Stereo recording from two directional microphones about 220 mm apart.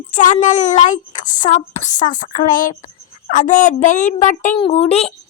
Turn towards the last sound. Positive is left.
turn(degrees=30)  # may be behind; listen again after turning